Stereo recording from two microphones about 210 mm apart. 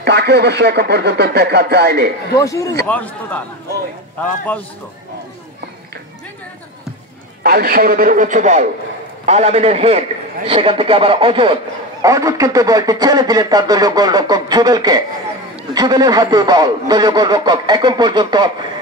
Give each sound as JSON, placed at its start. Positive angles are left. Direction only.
{"t": 0.0, "sound": "speech", "side_deg": -50}
{"t": 2.3, "sound": "speech", "side_deg": 15}
{"t": 7.4, "sound": "a man's voice", "side_deg": -45}